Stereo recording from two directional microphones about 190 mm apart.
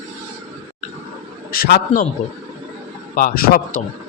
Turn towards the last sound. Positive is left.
turn(degrees=50)  # may be behind; listen again after turning